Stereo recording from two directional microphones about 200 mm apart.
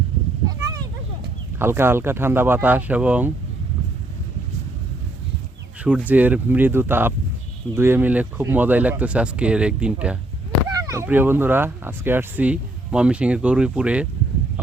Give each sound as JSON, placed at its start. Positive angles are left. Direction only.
{"t": 0.4, "sound": "a sound", "side_deg": -20}
{"t": 1.5, "sound": "speech", "side_deg": -10}
{"t": 5.8, "sound": "speech", "side_deg": -5}
{"t": 10.8, "sound": "speech", "side_deg": -15}